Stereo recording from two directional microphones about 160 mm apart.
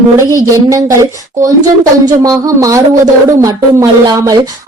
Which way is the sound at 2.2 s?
20° right (ahead or behind).